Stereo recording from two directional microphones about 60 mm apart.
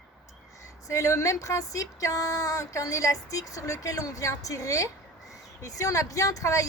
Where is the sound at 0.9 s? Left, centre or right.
Left.